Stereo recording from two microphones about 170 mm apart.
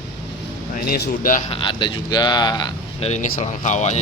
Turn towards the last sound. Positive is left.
turn(degrees=45)  # may be behind; listen again after turning